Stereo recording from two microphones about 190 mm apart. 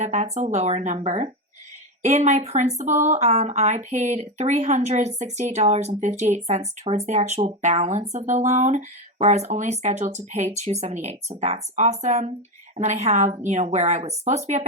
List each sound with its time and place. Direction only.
0.0 s speech: 35° right (ahead or behind)